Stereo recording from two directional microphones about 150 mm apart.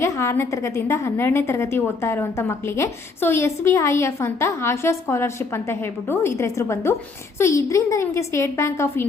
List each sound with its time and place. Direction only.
0.0 s a woman's voice: 15° left (ahead or behind)